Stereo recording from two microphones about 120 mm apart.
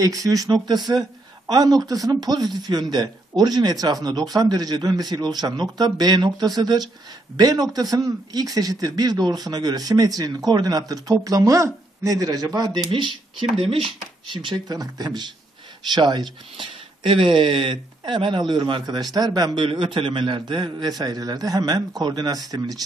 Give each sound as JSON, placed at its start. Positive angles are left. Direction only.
{"t": 0.0, "sound": "speech", "side_deg": -30}
{"t": 13.6, "sound": "speech", "side_deg": -50}
{"t": 14.3, "sound": "speech", "side_deg": -40}